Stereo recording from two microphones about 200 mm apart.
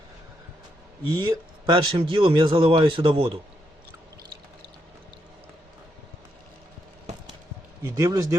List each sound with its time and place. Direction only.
1.0 s speech: 20° right (ahead or behind)
7.8 s speech: 15° right (ahead or behind)